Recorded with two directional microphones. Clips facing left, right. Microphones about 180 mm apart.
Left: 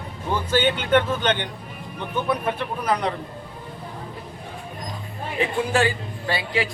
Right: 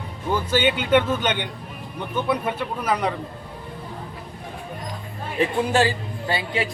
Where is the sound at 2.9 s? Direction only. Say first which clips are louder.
Even; 5° right (ahead or behind).